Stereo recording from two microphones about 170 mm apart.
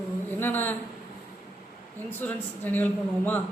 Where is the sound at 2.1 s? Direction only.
10° left (ahead or behind).